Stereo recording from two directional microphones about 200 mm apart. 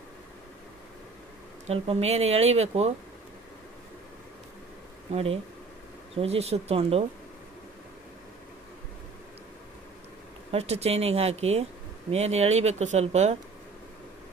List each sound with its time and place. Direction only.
1.7 s speech: 30° right (ahead or behind)
5.1 s speech: 30° right (ahead or behind)
10.5 s speech: 30° right (ahead or behind)